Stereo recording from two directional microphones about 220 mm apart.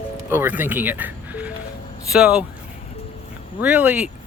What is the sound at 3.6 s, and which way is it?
Speech, 5° right (ahead or behind).